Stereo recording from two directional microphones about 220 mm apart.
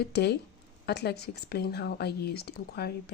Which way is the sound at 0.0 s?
50° left (ahead or behind).